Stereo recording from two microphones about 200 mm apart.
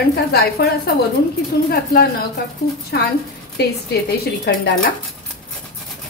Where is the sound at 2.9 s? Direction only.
60° left (ahead or behind).